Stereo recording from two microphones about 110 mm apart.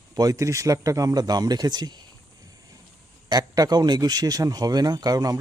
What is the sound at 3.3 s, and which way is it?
Speech, 35° right (ahead or behind).